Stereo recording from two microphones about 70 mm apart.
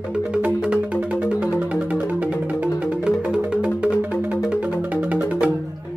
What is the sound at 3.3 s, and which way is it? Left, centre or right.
Music, centre.